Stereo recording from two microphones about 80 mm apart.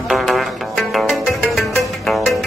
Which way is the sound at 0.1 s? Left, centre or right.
Centre.